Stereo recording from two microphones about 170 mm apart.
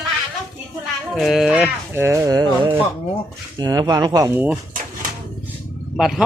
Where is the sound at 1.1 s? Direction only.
Centre (ahead or behind); by 4.3 s 20° right (ahead or behind).